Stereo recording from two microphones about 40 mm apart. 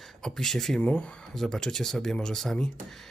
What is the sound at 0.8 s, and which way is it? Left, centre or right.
Speech, left.